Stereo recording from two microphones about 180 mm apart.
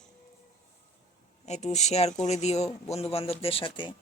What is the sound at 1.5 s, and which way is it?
Speech, 40° left (ahead or behind).